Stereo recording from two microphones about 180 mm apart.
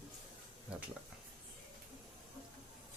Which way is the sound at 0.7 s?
5° right (ahead or behind).